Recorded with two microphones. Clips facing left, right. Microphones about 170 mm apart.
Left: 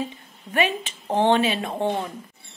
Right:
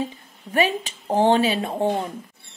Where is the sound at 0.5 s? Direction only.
35° right (ahead or behind).